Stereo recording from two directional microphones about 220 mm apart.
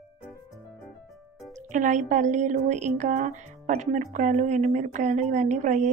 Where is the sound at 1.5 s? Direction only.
35° right (ahead or behind).